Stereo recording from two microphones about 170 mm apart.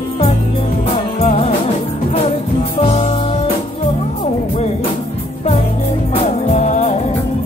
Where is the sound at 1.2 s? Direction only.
40° left (ahead or behind).